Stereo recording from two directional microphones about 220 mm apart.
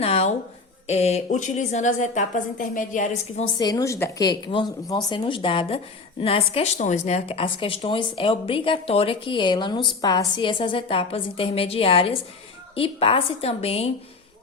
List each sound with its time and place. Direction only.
0.0 s a woman's voice: 25° left (ahead or behind)
3.6 s a woman's voice: 15° left (ahead or behind)